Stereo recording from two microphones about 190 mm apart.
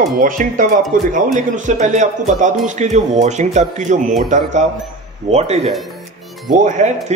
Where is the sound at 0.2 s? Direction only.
45° right (ahead or behind).